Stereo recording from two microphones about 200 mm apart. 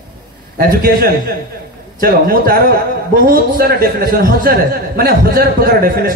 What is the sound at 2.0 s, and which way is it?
A man's voice, 45° right (ahead or behind).